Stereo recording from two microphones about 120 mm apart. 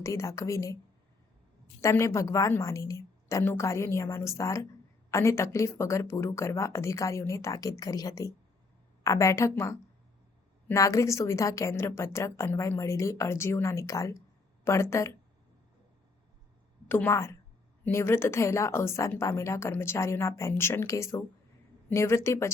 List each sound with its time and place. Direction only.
0.0 s a woman's voice: 25° left (ahead or behind)
1.8 s a woman's voice: 25° left (ahead or behind)
16.9 s a woman's voice: 20° left (ahead or behind)